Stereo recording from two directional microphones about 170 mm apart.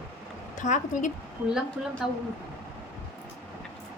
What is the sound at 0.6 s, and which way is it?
Speech, 45° left (ahead or behind).